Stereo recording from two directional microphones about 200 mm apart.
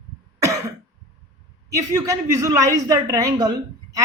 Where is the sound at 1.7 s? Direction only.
15° right (ahead or behind).